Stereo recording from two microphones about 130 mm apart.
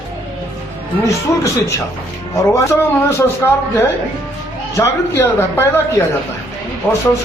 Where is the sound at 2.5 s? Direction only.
20° left (ahead or behind).